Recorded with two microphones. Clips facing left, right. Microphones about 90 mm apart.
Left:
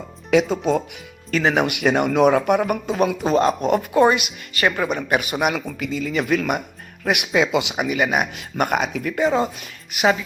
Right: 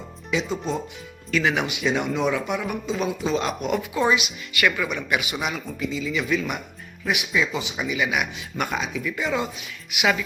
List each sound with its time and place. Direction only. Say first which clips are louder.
1.3 s speech: left 4 dB; 45° left (ahead or behind)
1.6 s speech: left 5 dB; 60° left (ahead or behind)
4.5 s speech: left 3 dB; 40° left (ahead or behind)
5.5 s speech: left 5 dB; 65° left (ahead or behind)
9.2 s a woman's voice: left 9 dB; 40° left (ahead or behind)